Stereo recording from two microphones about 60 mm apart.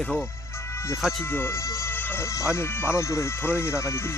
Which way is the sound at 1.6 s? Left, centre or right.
Left.